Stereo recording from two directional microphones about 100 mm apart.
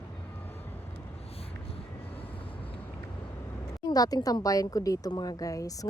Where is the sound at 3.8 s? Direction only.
40° left (ahead or behind).